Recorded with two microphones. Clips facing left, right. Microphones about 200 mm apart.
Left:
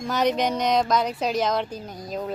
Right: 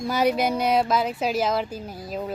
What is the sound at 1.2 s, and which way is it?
Speech, 5° right (ahead or behind).